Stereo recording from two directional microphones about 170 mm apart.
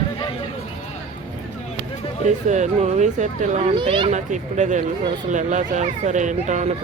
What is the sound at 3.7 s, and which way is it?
Speech, 30° right (ahead or behind).